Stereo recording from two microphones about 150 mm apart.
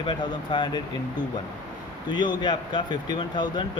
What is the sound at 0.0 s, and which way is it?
Speech, 30° left (ahead or behind).